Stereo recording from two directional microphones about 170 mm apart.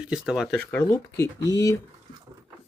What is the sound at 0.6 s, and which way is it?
Speech, 10° left (ahead or behind).